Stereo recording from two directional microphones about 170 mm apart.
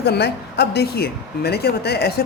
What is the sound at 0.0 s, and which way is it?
A woman's voice, 75° left (ahead or behind).